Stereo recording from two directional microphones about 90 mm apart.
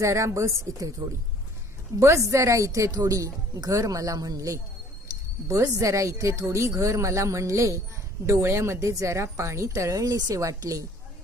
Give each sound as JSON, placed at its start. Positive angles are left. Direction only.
{"t": 0.0, "sound": "a woman's voice", "side_deg": -30}